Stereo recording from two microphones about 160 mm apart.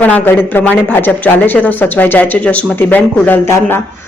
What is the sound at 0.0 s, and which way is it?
Speech, 10° left (ahead or behind).